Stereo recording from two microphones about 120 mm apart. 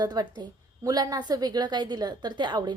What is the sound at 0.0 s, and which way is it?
A woman's voice, 35° right (ahead or behind).